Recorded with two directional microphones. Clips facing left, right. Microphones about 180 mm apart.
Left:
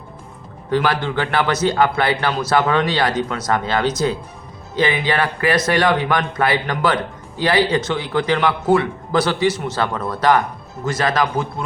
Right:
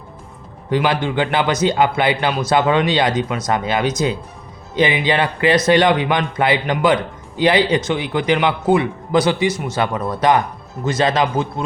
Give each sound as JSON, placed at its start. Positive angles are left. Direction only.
{"t": 0.7, "sound": "a man's voice", "side_deg": -15}